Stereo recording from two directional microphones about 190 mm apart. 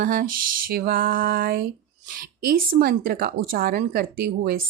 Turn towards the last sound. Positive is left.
turn(degrees=-50)  # may be behind; listen again after turning